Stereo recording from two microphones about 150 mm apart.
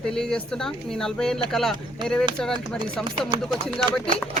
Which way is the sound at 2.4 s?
5° left (ahead or behind).